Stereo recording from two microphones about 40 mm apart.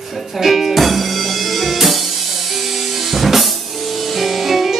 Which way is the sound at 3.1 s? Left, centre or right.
Centre.